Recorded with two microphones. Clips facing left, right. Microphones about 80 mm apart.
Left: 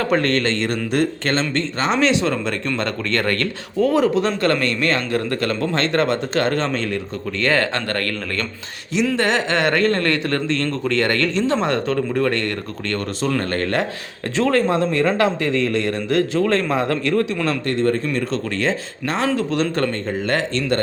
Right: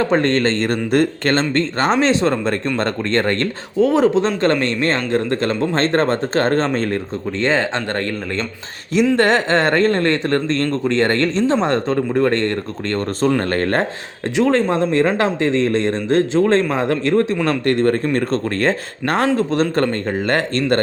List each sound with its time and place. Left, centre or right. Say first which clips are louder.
0.0 s speech: right 3 dB; right
9.1 s speech: right 3 dB; right
14.3 s speech: right 2 dB; centre
14.7 s speech: right 2 dB; right
17.7 s speech: right 4 dB; right
19.4 s speech: right 3 dB; right